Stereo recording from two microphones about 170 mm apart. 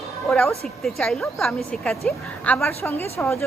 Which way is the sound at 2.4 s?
15° left (ahead or behind).